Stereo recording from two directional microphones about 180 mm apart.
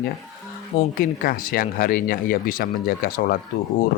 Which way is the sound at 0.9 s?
50° left (ahead or behind).